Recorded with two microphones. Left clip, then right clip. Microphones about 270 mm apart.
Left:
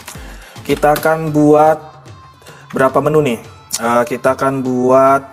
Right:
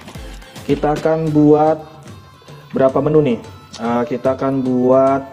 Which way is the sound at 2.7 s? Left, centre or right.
Left.